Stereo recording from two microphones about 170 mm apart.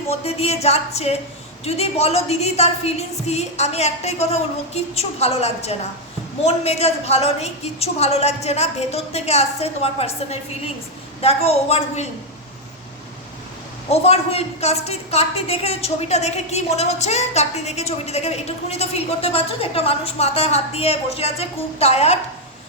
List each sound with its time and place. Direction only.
0.1 s a woman's voice: 35° left (ahead or behind)
13.9 s a woman's voice: 35° left (ahead or behind)